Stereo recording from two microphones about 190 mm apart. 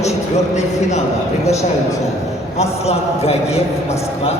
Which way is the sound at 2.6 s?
35° left (ahead or behind).